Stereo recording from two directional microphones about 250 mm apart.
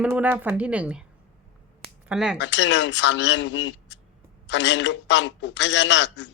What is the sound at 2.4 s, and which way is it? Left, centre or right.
A man's voice, left.